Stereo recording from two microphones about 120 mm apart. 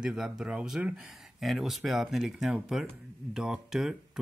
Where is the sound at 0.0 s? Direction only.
5° right (ahead or behind).